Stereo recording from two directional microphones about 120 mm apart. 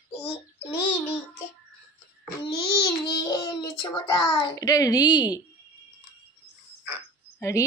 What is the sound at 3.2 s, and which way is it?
A child's voice, 35° left (ahead or behind).